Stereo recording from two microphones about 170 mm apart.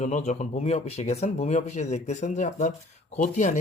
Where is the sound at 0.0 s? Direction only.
45° left (ahead or behind).